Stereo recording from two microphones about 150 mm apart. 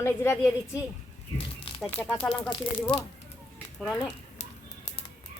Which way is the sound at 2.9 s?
35° left (ahead or behind).